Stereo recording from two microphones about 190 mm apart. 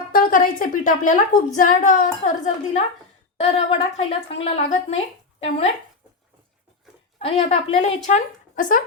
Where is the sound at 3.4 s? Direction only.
35° left (ahead or behind).